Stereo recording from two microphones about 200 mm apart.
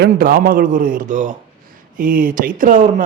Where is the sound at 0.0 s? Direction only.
45° right (ahead or behind).